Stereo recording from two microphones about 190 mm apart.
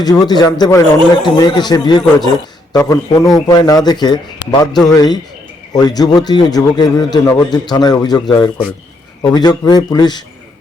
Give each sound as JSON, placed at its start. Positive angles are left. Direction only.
{"t": 0.0, "sound": "a man's voice", "side_deg": 20}